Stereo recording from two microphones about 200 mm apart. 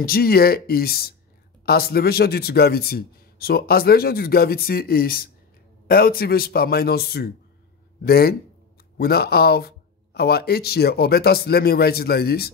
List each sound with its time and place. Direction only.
0.0 s a man's voice: 50° left (ahead or behind)